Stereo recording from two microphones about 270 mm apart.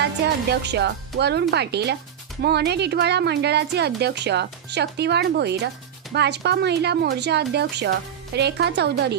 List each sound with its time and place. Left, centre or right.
0.5 s a woman's voice: right